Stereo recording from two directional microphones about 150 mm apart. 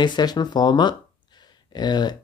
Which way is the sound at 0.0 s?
30° left (ahead or behind).